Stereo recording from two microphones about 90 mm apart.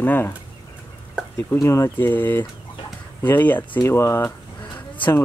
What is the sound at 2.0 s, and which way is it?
Speech, 20° left (ahead or behind).